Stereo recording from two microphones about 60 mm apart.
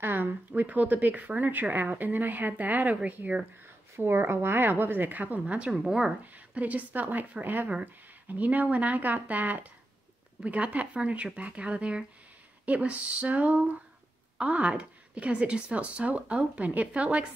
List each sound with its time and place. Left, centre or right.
0.0 s speech: right
3.9 s a woman's voice: right
5.7 s speech: centre
6.3 s speech: right